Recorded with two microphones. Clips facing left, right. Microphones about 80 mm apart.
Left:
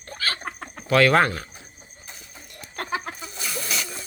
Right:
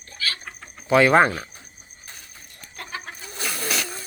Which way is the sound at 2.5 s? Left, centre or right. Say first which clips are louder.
Left 6 dB; left.